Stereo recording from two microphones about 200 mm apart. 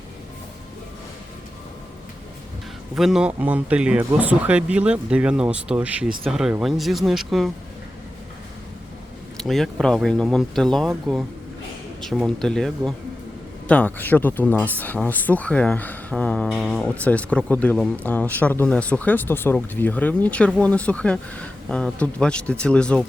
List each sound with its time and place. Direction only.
2.9 s speech: 5° right (ahead or behind)
9.4 s speech: centre (ahead or behind)